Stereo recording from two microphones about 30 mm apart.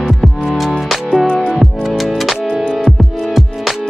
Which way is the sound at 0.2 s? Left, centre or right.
Centre.